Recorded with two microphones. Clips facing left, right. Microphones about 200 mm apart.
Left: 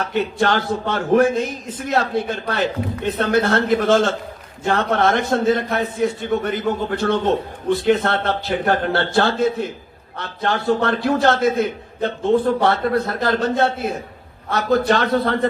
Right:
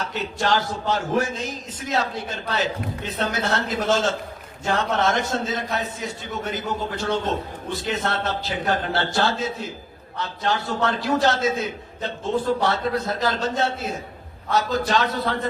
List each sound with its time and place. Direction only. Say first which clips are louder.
0.0 s a man's voice: left 6 dB; 55° left (ahead or behind)